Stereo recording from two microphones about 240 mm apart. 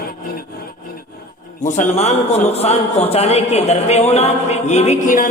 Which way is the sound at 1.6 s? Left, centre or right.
Left.